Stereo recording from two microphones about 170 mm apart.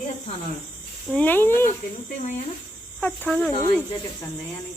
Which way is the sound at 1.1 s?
10° left (ahead or behind).